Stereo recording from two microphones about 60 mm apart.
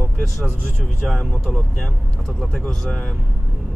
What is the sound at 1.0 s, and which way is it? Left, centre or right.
Speech, centre.